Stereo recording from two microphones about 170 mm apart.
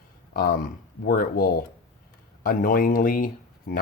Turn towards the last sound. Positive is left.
turn(degrees=70)  # may be behind; listen again after turning